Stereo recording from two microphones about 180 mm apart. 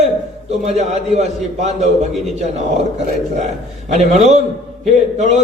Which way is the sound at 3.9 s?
40° right (ahead or behind).